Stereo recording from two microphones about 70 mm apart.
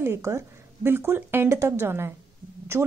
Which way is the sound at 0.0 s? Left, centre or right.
Right.